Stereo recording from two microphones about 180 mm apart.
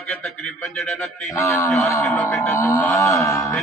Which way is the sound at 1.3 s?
15° left (ahead or behind).